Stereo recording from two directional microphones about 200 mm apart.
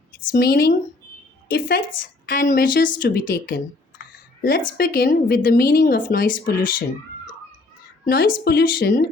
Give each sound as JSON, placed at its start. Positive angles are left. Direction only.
{"t": 0.3, "sound": "a woman's voice", "side_deg": 50}
{"t": 8.0, "sound": "a woman's voice", "side_deg": 50}